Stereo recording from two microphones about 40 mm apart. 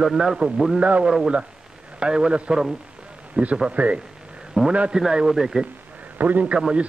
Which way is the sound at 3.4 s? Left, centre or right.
Right.